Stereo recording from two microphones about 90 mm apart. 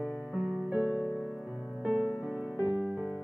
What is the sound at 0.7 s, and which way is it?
Music, 20° right (ahead or behind).